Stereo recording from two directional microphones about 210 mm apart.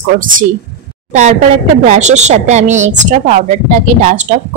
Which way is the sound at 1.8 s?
35° right (ahead or behind).